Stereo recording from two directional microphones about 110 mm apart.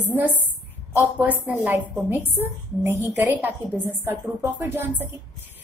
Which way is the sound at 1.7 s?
15° right (ahead or behind).